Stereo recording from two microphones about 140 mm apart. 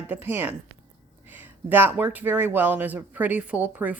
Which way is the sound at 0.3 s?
15° right (ahead or behind).